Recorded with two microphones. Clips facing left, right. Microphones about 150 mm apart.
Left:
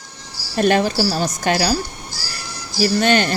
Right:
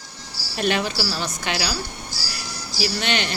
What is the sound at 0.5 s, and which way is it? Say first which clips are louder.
Speech: left 7 dB; 45° left (ahead or behind).